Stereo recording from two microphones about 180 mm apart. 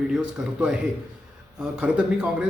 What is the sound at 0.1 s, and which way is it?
A man's voice, 5° right (ahead or behind).